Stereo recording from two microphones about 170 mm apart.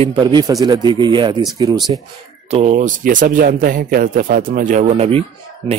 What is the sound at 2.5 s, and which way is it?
Speech, 40° right (ahead or behind).